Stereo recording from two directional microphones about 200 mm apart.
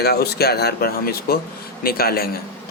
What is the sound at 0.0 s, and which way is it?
Speech, 50° left (ahead or behind).